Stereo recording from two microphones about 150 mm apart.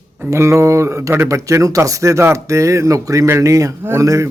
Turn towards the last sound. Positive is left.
turn(degrees=-20)  # may be behind; listen again after turning